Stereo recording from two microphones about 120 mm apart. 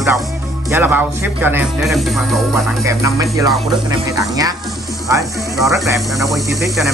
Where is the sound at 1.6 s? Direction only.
Centre (ahead or behind).